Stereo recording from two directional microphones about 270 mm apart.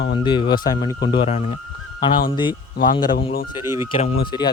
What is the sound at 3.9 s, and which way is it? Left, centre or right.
Speech, left.